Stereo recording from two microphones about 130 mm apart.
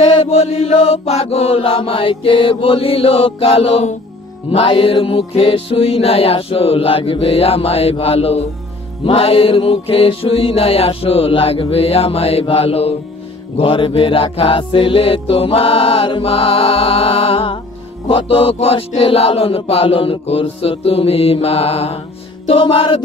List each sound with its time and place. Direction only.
0.2 s music: 55° left (ahead or behind)
22.5 s music: 40° left (ahead or behind)